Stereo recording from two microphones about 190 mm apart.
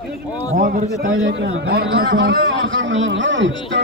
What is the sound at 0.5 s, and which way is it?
Speech, 45° right (ahead or behind).